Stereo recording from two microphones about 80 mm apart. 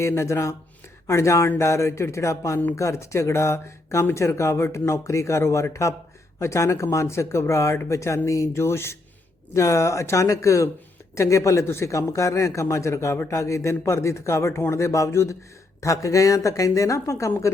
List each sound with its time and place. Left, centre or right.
0.0 s a man's voice: left